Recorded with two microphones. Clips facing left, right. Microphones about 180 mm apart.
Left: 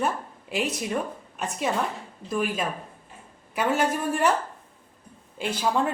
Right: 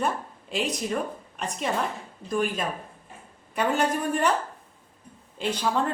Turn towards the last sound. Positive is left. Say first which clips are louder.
# left 1 dB
turn(degrees=10)  # may be behind; listen again after turning